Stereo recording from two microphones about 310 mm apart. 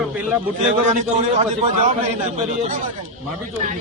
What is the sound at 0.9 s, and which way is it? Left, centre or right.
Speech, right.